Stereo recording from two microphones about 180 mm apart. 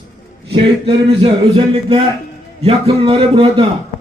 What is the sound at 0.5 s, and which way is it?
A man's voice, 30° right (ahead or behind).